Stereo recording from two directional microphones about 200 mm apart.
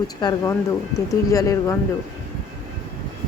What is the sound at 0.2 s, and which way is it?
A woman's voice, 20° left (ahead or behind).